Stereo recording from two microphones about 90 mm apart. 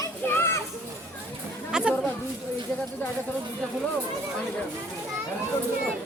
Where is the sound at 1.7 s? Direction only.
10° right (ahead or behind).